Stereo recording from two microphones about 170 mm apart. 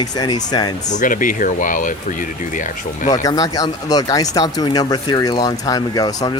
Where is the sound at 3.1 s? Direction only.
20° left (ahead or behind).